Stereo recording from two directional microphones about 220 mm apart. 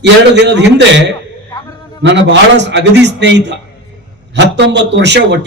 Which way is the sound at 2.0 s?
55° right (ahead or behind).